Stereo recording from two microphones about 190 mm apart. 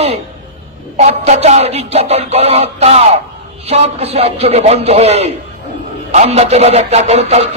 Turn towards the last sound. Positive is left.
turn(degrees=-35)  # may be behind; listen again after turning